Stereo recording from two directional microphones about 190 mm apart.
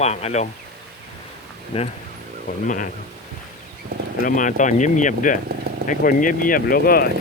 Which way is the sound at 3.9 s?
55° right (ahead or behind).